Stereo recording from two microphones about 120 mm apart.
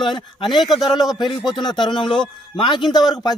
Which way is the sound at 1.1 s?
40° left (ahead or behind).